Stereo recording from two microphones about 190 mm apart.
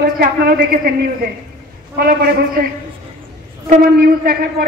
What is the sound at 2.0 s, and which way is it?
Speech, 55° right (ahead or behind).